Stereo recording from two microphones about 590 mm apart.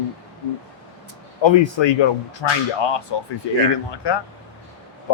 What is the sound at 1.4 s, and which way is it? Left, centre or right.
Speech, left.